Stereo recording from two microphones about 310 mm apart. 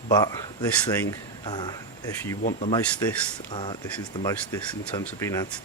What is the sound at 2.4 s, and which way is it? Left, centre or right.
Speech, left.